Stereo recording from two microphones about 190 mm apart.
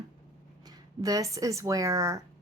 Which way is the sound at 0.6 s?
20° right (ahead or behind).